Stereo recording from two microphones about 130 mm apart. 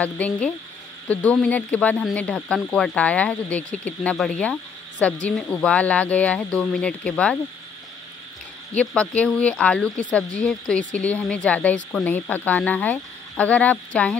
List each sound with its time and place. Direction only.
0.0 s speech: 10° left (ahead or behind)
8.7 s speech: 10° left (ahead or behind)